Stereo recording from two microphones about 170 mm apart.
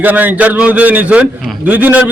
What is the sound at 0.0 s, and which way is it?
A man's voice, 10° right (ahead or behind).